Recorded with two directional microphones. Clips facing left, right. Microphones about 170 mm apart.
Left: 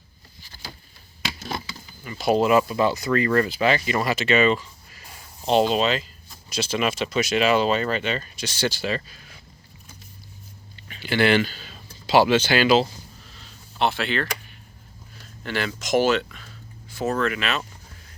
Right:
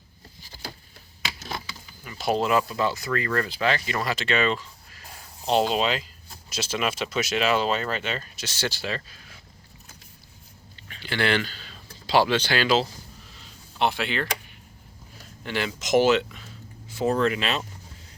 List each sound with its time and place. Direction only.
2.0 s speech: centre (ahead or behind)
10.8 s speech: 10° left (ahead or behind)
13.4 s a sound: 15° right (ahead or behind)
15.4 s speech: 20° right (ahead or behind)